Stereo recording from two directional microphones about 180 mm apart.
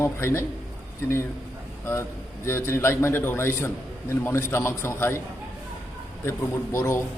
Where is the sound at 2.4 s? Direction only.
15° left (ahead or behind).